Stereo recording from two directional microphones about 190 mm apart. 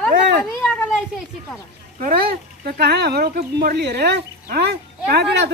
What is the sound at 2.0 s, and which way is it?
Speech, 50° right (ahead or behind).